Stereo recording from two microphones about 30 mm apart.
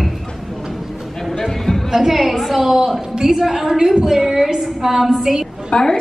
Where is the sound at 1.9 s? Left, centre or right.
Centre.